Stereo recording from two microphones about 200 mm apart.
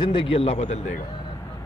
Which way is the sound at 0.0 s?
25° left (ahead or behind).